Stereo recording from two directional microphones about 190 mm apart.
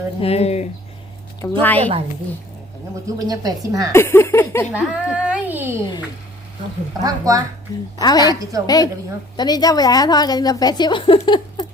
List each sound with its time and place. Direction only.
0.2 s speech: 30° left (ahead or behind)
1.4 s a woman's voice: 10° left (ahead or behind)
3.2 s a woman's voice: 20° right (ahead or behind)
3.9 s speech: 10° left (ahead or behind)
4.7 s a child's voice: 5° right (ahead or behind)
7.0 s a woman's voice: 20° right (ahead or behind)
7.9 s a woman's voice: 20° left (ahead or behind)